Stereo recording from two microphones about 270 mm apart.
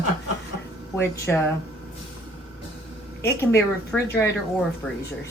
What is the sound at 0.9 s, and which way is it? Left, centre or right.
Speech, centre.